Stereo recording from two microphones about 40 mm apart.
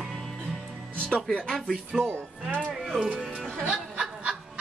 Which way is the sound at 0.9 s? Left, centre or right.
Left.